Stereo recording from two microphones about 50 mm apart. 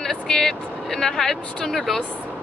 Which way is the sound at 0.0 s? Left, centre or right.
Centre.